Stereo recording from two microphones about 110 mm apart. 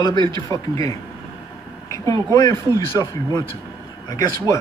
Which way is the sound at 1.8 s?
30° left (ahead or behind).